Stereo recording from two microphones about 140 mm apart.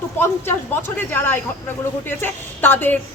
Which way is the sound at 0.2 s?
15° left (ahead or behind).